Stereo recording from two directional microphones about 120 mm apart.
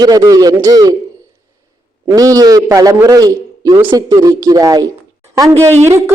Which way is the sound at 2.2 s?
30° right (ahead or behind).